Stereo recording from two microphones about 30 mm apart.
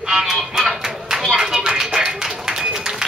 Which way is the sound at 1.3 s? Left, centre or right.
Right.